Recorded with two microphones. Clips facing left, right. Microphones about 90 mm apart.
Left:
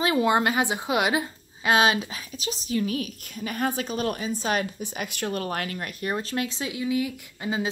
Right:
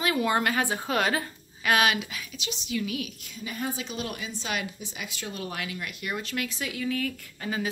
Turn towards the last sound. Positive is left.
turn(degrees=20)  # may be behind; listen again after turning